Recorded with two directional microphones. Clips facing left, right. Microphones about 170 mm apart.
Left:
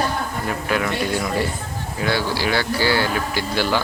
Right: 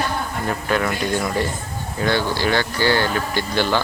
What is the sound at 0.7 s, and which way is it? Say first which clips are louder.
Speech: right 1 dB; 10° left (ahead or behind).